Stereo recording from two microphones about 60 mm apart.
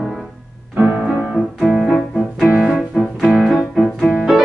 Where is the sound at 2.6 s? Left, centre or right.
Centre.